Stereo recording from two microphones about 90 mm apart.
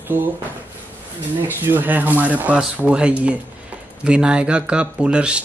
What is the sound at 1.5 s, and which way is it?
Speech, 20° right (ahead or behind).